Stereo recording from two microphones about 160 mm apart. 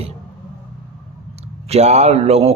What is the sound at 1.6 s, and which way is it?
Speech, 40° right (ahead or behind).